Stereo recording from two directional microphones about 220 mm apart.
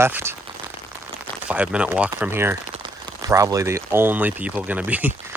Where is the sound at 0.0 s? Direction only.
10° right (ahead or behind).